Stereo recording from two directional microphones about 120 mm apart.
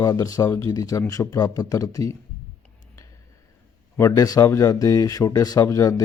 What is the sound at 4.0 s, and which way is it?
Speech, 30° left (ahead or behind).